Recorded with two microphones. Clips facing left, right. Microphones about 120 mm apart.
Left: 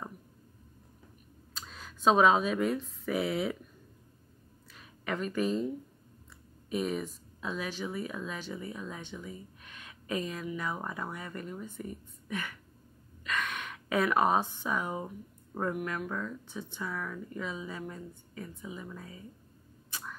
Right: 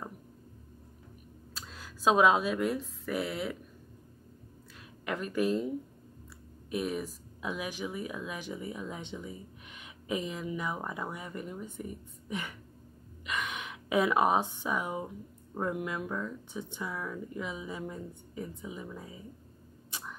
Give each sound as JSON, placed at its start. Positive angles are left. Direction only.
{"t": 1.5, "sound": "speech", "side_deg": 0}
{"t": 5.0, "sound": "speech", "side_deg": -5}
{"t": 6.7, "sound": "speech", "side_deg": -5}